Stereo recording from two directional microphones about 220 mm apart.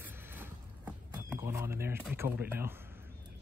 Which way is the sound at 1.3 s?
10° right (ahead or behind).